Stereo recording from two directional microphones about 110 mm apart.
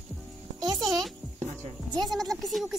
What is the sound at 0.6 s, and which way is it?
Speech, 40° right (ahead or behind).